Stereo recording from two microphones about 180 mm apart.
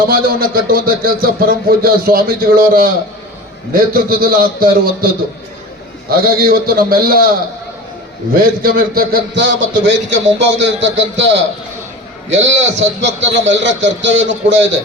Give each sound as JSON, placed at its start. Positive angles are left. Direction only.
{"t": 0.1, "sound": "a man's voice", "side_deg": -55}
{"t": 8.4, "sound": "speech", "side_deg": -55}
{"t": 9.3, "sound": "a man's voice", "side_deg": -85}